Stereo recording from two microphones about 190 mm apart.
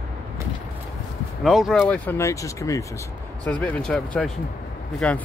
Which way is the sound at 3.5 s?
5° left (ahead or behind).